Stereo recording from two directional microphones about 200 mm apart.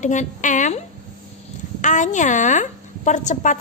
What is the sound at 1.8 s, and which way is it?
A woman's voice, 40° left (ahead or behind).